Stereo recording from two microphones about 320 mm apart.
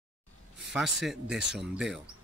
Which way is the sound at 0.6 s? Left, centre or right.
Centre.